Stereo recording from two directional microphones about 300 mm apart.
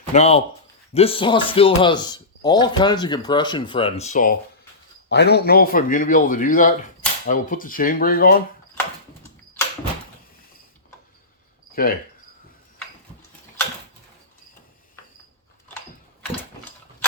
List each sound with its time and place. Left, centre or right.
0.1 s a man's voice: centre
11.7 s speech: left
16.3 s tick-tock: centre